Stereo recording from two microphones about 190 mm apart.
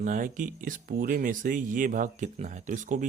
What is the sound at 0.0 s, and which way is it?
Speech, 40° right (ahead or behind).